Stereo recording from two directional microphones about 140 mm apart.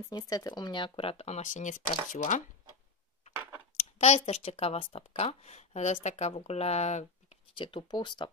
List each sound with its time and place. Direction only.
0.1 s speech: 30° left (ahead or behind); by 2.4 s 65° left (ahead or behind)
3.7 s speech: 55° left (ahead or behind)
7.5 s speech: 35° left (ahead or behind)